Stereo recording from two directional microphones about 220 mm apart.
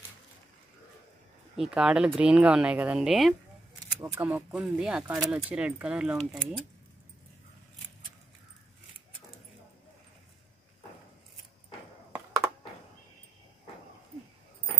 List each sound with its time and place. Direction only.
1.6 s speech: 5° right (ahead or behind)